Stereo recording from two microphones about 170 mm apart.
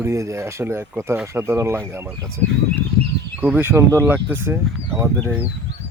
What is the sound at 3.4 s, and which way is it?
A man's voice, 10° right (ahead or behind).